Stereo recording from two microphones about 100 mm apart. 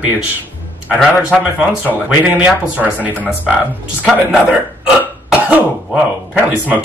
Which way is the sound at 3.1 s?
15° left (ahead or behind).